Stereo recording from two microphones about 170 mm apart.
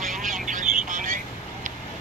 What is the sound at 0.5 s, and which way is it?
Vehicle, 50° right (ahead or behind).